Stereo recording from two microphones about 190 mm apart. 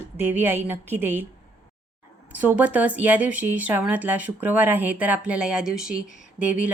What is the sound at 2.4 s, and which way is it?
Speech, 10° right (ahead or behind).